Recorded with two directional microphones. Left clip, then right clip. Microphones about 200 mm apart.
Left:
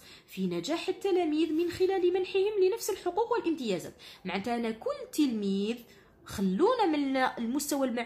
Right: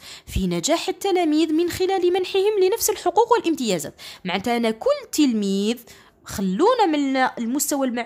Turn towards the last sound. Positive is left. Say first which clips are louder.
# right 7 dB
turn(degrees=-35)  # may be behind; listen again after turning